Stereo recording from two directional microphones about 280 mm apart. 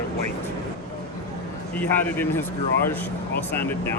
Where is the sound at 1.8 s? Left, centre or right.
Centre.